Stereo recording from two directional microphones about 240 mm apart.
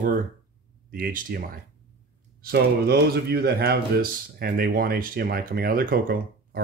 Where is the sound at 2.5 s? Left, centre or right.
Right.